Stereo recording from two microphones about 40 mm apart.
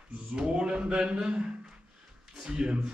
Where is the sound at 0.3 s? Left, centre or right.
Right.